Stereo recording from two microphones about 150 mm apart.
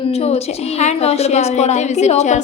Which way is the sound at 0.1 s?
45° left (ahead or behind).